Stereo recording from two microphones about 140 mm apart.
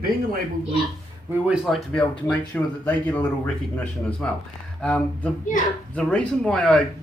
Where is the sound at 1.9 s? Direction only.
5° left (ahead or behind).